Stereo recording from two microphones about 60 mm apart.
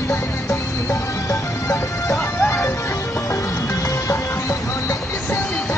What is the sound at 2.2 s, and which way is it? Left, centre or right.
Music, left.